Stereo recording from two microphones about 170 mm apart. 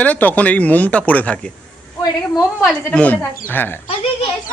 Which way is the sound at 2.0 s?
20° left (ahead or behind).